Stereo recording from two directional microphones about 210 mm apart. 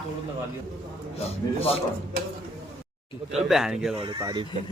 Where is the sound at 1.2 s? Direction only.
30° left (ahead or behind).